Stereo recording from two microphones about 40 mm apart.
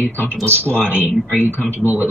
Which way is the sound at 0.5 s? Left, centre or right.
Left.